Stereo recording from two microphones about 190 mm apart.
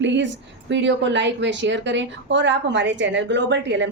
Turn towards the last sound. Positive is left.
turn(degrees=-70)  # may be behind; listen again after turning